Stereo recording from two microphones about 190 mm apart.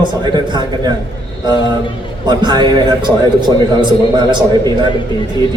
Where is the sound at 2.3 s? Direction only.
25° right (ahead or behind).